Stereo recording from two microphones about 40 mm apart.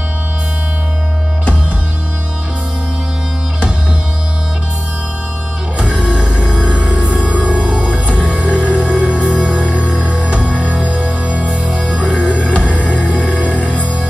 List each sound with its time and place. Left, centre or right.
5.8 s music: right
7.2 s music: right
7.5 s music: right
10.6 s music: right
12.4 s music: left